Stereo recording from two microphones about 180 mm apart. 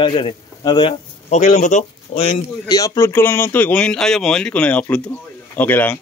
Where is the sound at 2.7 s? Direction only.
15° left (ahead or behind).